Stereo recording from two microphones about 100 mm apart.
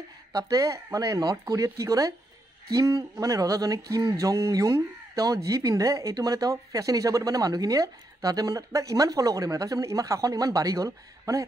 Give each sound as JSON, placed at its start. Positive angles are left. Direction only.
{"t": 0.3, "sound": "speech", "side_deg": -35}